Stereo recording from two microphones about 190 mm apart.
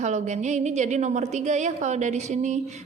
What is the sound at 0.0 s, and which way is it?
A woman's voice, 40° right (ahead or behind).